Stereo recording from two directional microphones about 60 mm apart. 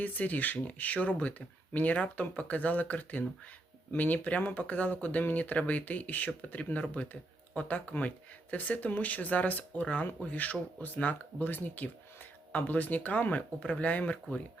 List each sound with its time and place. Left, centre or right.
0.0 s speech: left